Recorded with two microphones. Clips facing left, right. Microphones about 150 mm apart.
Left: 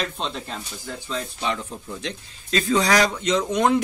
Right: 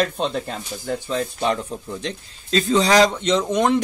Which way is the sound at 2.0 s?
35° right (ahead or behind).